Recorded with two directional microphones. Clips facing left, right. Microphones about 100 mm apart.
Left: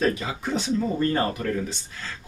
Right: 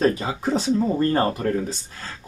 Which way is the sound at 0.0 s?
35° right (ahead or behind).